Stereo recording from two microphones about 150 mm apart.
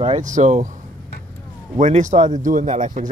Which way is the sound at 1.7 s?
55° right (ahead or behind).